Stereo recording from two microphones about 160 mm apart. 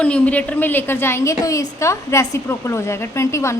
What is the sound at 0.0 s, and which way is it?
A woman's voice, 10° left (ahead or behind).